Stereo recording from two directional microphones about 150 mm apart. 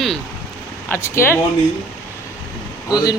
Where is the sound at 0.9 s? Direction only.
15° left (ahead or behind).